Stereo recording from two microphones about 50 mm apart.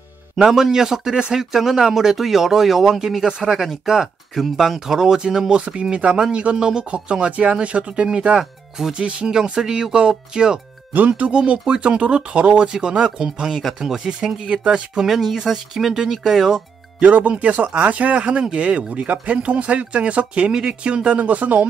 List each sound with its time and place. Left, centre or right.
0.4 s speech: centre
10.9 s speech: right
15.0 s speech: centre
17.0 s speech: right